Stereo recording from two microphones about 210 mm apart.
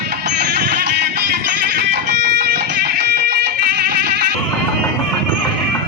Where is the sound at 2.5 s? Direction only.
50° right (ahead or behind).